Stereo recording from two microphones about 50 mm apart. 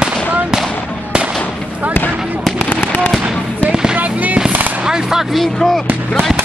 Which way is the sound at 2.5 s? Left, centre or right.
Left.